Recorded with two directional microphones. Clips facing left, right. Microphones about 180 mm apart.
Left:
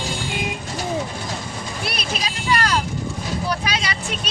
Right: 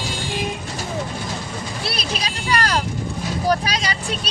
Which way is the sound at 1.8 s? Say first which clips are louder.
Even; 35° right (ahead or behind).